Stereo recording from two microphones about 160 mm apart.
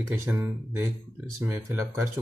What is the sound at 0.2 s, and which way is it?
Speech, 20° right (ahead or behind).